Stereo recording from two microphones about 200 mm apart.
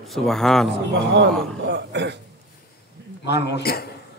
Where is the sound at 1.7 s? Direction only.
60° right (ahead or behind).